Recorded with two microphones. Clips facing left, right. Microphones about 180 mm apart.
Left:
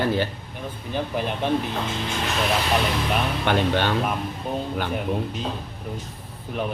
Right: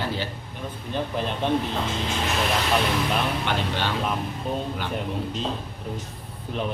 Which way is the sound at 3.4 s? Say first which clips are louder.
Left 5 dB; 50° left (ahead or behind).